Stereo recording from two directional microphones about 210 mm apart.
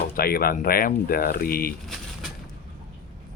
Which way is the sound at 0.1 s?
45° left (ahead or behind).